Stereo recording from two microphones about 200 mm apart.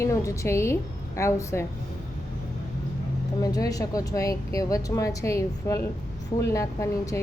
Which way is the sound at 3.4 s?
20° left (ahead or behind).